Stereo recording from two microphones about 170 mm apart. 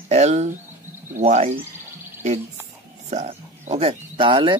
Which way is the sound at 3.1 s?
40° right (ahead or behind).